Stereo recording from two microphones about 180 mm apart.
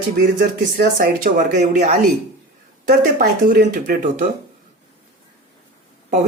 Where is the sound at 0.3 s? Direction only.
55° right (ahead or behind).